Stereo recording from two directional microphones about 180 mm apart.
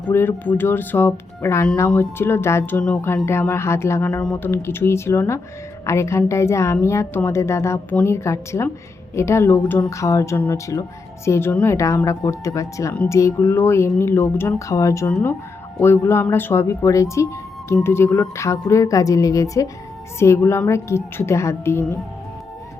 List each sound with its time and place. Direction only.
0.0 s speech: 10° left (ahead or behind)